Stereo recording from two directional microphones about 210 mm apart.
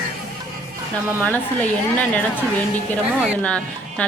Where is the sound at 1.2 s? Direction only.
5° left (ahead or behind).